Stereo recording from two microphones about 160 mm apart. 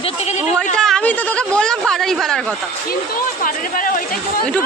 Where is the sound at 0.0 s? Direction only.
40° left (ahead or behind).